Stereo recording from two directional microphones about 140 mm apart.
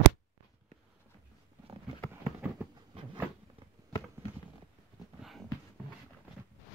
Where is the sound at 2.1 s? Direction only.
15° right (ahead or behind).